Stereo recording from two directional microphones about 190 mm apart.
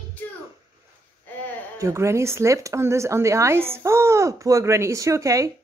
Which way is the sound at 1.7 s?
15° right (ahead or behind).